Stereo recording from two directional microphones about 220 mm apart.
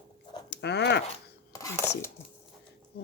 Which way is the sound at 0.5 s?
50° left (ahead or behind).